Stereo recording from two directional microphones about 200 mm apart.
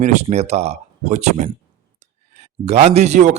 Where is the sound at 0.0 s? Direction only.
35° right (ahead or behind).